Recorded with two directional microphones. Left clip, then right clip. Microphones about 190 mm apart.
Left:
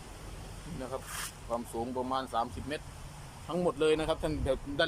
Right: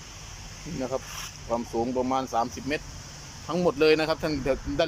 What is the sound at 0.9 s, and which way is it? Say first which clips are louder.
Speech: right 6 dB; 20° right (ahead or behind).